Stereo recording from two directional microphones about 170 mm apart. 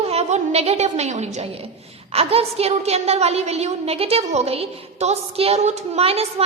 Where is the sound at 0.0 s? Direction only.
40° right (ahead or behind).